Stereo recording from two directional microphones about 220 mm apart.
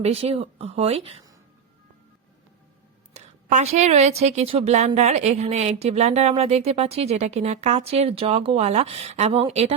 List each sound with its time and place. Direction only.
0.0 s a woman's voice: 25° right (ahead or behind)
3.1 s a sound: 30° right (ahead or behind)
4.2 s a woman's voice: 30° right (ahead or behind)